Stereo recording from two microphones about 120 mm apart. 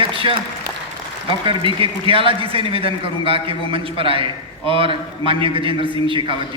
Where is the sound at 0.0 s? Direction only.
45° right (ahead or behind).